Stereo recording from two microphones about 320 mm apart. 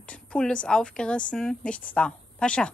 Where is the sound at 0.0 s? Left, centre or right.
Centre.